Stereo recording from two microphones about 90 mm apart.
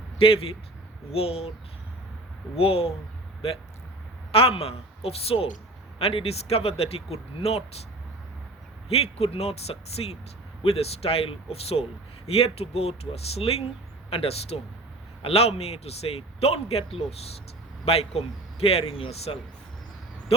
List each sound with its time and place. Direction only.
0.2 s a man's voice: 90° left
2.6 s a man's voice: 90° left
4.3 s a man's voice: 90° left
8.9 s a man's voice: 90° left